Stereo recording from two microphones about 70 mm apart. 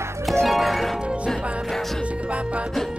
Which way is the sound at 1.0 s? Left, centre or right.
Centre.